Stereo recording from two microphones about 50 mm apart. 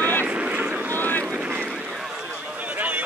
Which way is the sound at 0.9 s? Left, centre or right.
Left.